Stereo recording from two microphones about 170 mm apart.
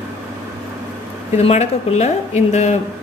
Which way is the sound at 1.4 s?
40° left (ahead or behind).